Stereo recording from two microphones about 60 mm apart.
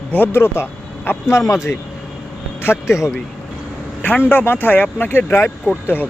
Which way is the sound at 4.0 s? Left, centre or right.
Left.